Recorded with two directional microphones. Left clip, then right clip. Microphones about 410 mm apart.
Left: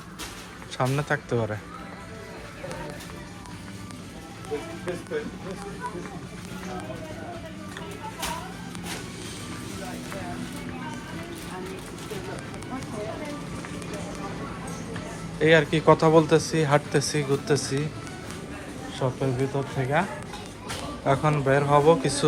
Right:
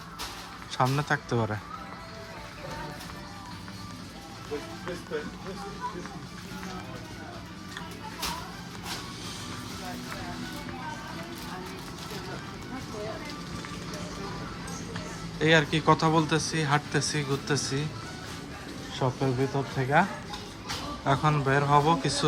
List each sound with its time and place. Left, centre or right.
0.8 s speech: centre
15.4 s speech: centre
18.9 s speech: centre